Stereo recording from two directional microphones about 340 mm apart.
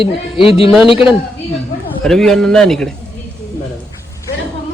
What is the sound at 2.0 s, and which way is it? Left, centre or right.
Speech, centre.